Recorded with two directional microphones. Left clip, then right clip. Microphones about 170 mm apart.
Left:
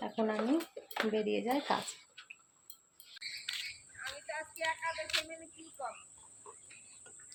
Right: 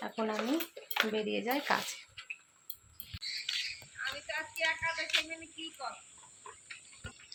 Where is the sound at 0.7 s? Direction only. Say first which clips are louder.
Right 5 dB; 25° left (ahead or behind).